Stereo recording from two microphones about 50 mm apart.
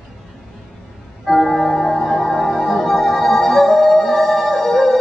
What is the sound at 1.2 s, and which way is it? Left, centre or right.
Music, centre.